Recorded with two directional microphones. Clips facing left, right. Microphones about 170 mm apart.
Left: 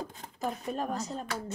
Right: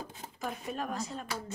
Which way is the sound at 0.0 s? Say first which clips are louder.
Left 3 dB; 5° right (ahead or behind).